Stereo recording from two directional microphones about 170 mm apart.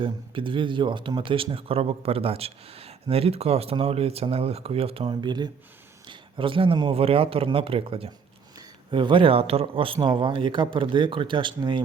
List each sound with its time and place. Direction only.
0.0 s a man's voice: 30° right (ahead or behind)